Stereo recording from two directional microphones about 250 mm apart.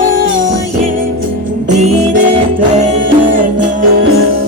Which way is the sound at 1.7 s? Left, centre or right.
Right.